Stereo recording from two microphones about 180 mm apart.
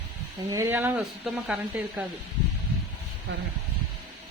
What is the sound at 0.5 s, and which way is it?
Speech, 15° right (ahead or behind).